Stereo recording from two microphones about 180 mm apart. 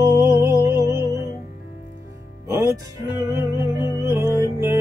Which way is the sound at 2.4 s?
15° right (ahead or behind).